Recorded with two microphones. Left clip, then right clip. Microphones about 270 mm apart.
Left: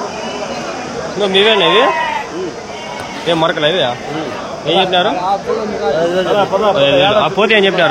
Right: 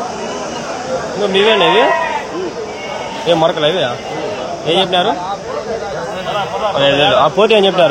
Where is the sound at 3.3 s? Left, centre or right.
Centre.